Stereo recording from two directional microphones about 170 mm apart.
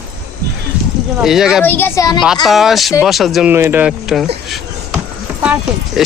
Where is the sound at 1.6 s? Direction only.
10° left (ahead or behind).